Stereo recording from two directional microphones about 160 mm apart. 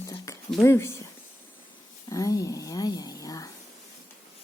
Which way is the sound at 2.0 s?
20° left (ahead or behind).